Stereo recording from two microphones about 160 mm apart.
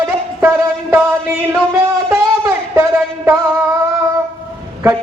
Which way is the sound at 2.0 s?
20° right (ahead or behind).